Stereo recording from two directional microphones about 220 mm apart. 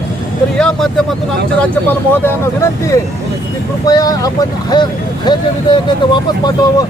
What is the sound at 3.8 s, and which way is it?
Speech, 15° left (ahead or behind).